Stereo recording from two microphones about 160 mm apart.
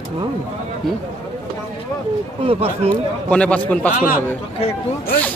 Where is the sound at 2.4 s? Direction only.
35° right (ahead or behind).